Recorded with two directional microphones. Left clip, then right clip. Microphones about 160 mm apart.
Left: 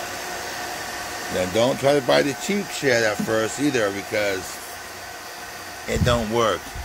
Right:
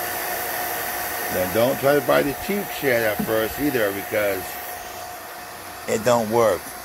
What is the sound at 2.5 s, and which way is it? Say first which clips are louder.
Speech: even; 30° right (ahead or behind).